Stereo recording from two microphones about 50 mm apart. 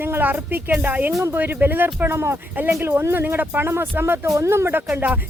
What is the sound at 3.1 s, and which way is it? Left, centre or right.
Speech, right.